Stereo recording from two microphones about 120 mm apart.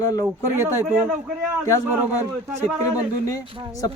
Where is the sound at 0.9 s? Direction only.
15° right (ahead or behind).